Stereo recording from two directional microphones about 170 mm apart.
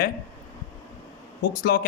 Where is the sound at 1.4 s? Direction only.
60° left (ahead or behind).